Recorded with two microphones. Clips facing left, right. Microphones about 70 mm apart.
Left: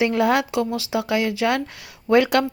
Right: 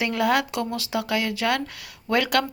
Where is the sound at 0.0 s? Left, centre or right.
Left.